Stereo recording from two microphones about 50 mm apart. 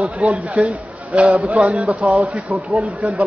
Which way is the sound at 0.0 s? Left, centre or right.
Right.